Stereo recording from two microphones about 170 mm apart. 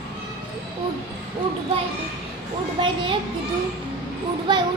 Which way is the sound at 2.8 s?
30° right (ahead or behind).